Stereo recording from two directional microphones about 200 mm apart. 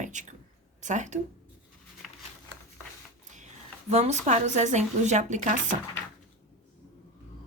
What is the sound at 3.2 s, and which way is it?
A woman's voice, 35° right (ahead or behind).